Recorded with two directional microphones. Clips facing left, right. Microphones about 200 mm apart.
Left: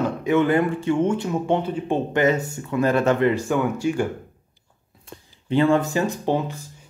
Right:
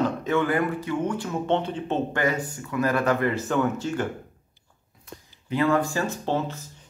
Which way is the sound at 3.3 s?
10° left (ahead or behind).